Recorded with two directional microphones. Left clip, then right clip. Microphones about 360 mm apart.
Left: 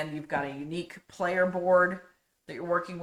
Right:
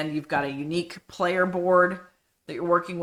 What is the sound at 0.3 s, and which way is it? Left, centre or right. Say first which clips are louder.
Speech: right 5 dB; right.